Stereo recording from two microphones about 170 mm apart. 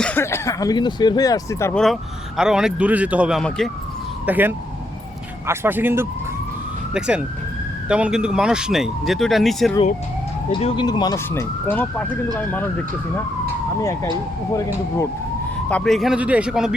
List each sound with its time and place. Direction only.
0.0 s speech: 10° left (ahead or behind)
1.7 s speech: centre (ahead or behind)
10.5 s speech: 30° left (ahead or behind)
11.3 s speech: 10° left (ahead or behind)
13.8 s speech: 20° left (ahead or behind)
15.7 s speech: centre (ahead or behind)